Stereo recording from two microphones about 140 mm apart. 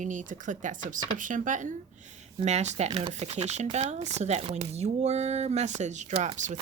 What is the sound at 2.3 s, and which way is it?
Speech, 55° right (ahead or behind).